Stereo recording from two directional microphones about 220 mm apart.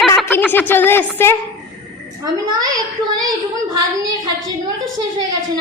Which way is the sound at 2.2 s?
20° right (ahead or behind).